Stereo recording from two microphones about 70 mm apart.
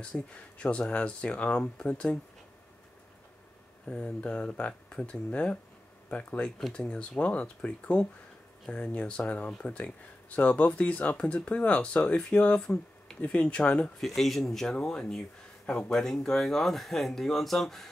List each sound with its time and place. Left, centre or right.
0.0 s speech: centre
3.8 s speech: centre
14.0 s speech: centre